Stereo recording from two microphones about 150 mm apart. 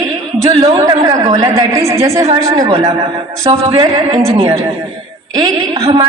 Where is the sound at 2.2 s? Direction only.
45° right (ahead or behind).